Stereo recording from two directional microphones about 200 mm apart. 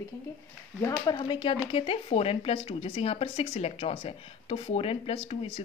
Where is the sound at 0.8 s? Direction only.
20° left (ahead or behind).